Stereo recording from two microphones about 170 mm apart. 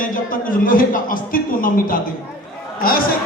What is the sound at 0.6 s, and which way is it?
A man's voice, 55° left (ahead or behind).